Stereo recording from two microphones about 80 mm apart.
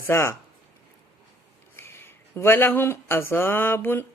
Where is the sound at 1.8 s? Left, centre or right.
Left.